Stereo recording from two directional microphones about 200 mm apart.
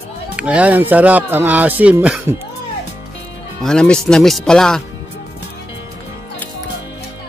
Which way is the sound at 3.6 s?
5° left (ahead or behind).